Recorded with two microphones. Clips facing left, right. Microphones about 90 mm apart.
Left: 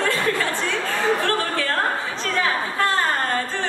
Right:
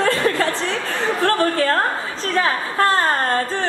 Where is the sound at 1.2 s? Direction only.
40° right (ahead or behind).